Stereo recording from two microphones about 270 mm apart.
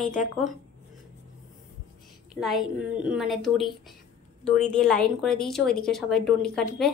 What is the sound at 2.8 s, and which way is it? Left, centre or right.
A woman's voice, centre.